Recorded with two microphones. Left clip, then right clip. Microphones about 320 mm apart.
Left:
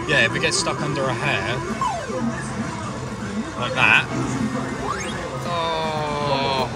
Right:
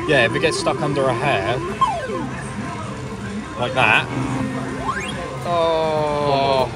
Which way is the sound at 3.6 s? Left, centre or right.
Centre.